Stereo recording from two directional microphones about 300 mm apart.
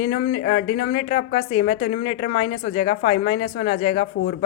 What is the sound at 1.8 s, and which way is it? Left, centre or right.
Speech, left.